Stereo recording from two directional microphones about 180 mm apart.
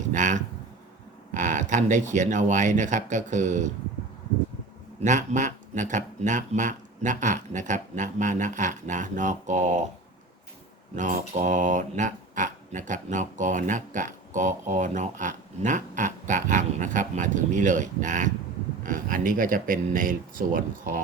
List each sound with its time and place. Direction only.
0.1 s speech: 45° right (ahead or behind)
4.9 s speech: 45° right (ahead or behind)
10.9 s speech: 45° right (ahead or behind)